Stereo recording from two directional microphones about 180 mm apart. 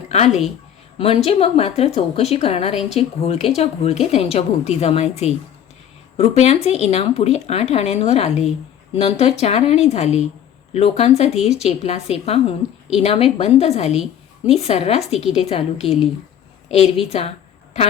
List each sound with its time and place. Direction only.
0.1 s a woman's voice: 35° left (ahead or behind)